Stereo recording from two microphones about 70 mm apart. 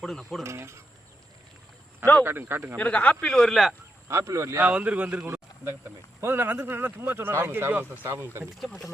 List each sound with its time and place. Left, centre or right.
0.0 s speech: centre
0.4 s speech: right
2.2 s speech: right
2.7 s speech: centre
4.1 s speech: right
4.6 s a man's voice: right
5.2 s a sound: right
6.1 s speech: right
8.6 s speech: centre